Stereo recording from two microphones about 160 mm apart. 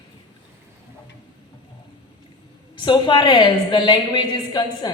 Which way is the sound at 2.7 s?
30° left (ahead or behind).